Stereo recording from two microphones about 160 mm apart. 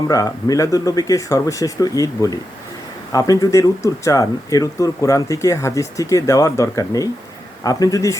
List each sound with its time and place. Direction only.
0.1 s speech: 20° left (ahead or behind)